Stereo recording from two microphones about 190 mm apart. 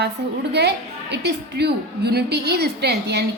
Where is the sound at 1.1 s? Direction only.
60° right (ahead or behind).